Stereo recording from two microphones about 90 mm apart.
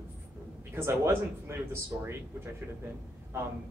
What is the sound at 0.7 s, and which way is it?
Speech, 25° right (ahead or behind).